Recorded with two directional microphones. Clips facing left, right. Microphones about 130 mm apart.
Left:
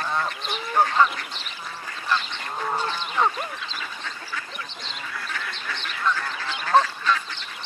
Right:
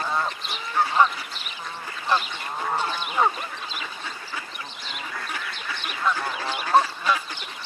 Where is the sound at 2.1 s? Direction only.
15° right (ahead or behind).